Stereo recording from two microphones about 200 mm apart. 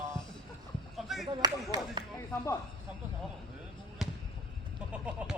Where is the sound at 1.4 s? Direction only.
20° right (ahead or behind).